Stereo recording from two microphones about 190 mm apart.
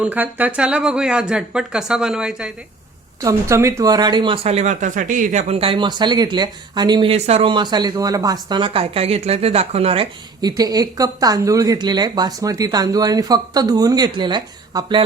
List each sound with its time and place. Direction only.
0.0 s speech: 10° right (ahead or behind)
3.2 s speech: 15° right (ahead or behind)